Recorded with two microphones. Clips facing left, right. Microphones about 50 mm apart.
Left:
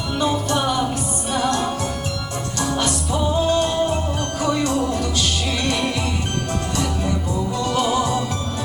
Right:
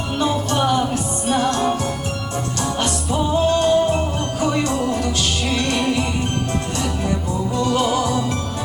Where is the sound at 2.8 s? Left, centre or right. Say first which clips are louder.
Right 2 dB; right.